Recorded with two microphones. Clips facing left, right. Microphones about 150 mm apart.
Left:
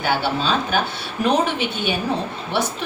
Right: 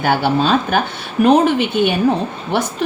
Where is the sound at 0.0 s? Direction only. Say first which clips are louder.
Right 6 dB; 50° right (ahead or behind).